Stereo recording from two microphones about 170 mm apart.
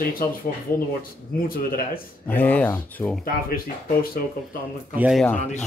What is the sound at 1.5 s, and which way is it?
Speech, 60° left (ahead or behind).